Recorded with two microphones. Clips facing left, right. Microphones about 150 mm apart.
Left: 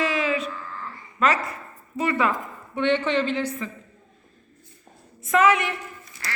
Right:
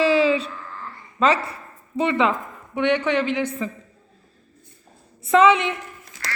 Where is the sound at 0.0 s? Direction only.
30° right (ahead or behind).